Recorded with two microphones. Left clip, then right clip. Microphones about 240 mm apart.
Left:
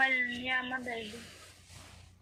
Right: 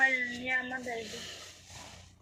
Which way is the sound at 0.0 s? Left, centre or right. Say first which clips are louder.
Right 1 dB; left.